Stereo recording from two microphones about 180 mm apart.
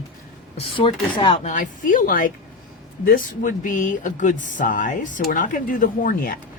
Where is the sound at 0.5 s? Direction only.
30° left (ahead or behind).